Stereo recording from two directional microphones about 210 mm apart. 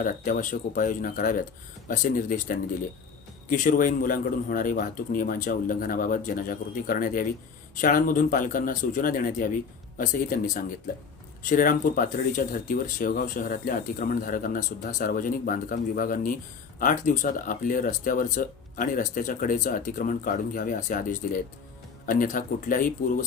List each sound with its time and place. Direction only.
0.0 s speech: 40° left (ahead or behind)